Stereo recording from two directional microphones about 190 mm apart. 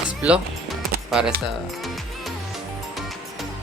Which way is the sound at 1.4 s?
Centre (ahead or behind).